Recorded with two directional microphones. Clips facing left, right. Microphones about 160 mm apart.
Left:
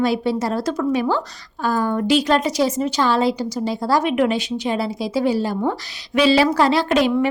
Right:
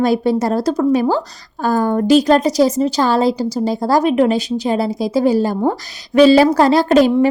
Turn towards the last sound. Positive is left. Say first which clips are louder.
# right 6 dB
turn(degrees=-40)  # may be behind; listen again after turning